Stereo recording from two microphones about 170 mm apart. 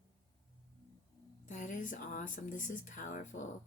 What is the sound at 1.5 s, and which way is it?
A woman's voice, 45° left (ahead or behind).